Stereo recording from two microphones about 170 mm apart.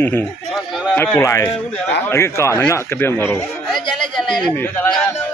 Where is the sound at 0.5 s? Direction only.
Centre (ahead or behind).